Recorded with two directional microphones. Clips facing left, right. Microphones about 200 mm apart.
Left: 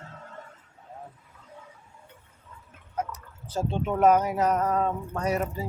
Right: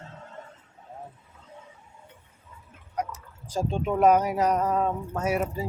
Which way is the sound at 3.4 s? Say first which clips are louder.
Right 1 dB; 10° right (ahead or behind).